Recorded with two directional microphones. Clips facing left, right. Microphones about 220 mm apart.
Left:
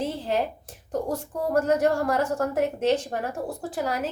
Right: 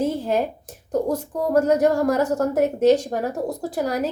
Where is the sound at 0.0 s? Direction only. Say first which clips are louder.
Right 5 dB; 45° right (ahead or behind).